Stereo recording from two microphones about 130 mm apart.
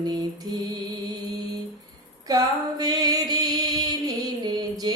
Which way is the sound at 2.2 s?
30° right (ahead or behind).